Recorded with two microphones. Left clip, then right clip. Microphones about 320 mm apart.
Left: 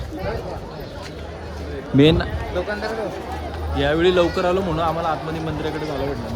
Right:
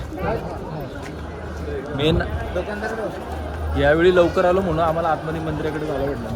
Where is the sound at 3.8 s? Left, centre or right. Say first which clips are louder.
Right 2 dB; centre.